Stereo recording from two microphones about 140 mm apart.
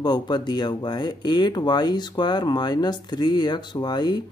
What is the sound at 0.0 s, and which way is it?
Speech, 30° left (ahead or behind).